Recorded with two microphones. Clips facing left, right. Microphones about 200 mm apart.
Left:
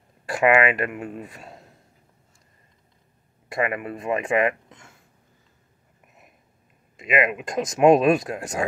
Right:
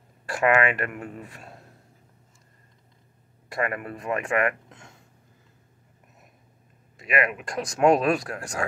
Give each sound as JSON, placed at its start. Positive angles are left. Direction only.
{"t": 0.3, "sound": "speech", "side_deg": 15}
{"t": 3.5, "sound": "speech", "side_deg": 20}
{"t": 7.0, "sound": "speech", "side_deg": 20}